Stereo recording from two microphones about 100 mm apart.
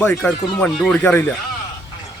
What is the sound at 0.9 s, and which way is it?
Speech, 15° left (ahead or behind).